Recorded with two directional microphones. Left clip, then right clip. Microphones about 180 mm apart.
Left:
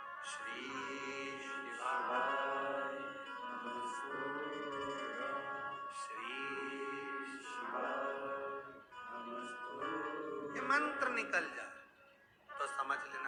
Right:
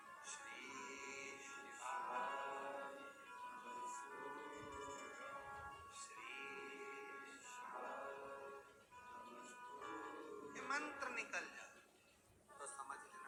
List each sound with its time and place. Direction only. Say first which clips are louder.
0.7 s music: left 9 dB; 30° left (ahead or behind)
9.8 s music: left 11 dB; 30° left (ahead or behind)
12.5 s a sound: left 14 dB; 45° left (ahead or behind)